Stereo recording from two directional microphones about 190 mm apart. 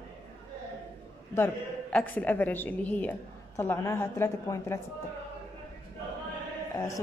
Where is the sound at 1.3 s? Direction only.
10° left (ahead or behind).